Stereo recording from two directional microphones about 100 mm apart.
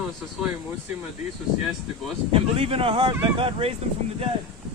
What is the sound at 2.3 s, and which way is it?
Speech, 70° right (ahead or behind).